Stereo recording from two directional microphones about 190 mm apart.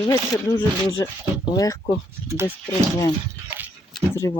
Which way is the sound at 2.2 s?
15° right (ahead or behind).